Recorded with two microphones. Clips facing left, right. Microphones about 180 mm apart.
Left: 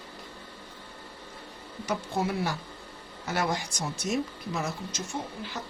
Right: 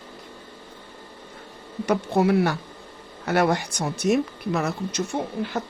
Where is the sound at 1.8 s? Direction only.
65° right (ahead or behind).